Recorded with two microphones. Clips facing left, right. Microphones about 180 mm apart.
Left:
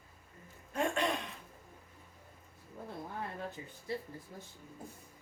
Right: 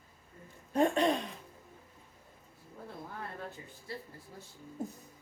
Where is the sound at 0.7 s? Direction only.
30° right (ahead or behind).